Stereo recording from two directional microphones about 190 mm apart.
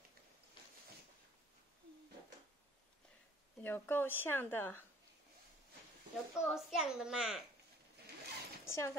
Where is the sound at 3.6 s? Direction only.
10° left (ahead or behind).